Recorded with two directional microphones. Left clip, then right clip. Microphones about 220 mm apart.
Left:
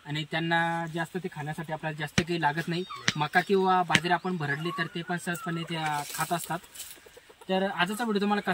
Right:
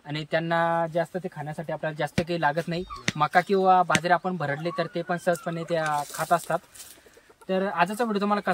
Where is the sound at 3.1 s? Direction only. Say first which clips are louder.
Even; 5° right (ahead or behind).